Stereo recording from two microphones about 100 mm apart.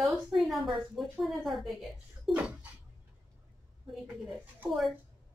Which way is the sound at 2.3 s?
10° right (ahead or behind).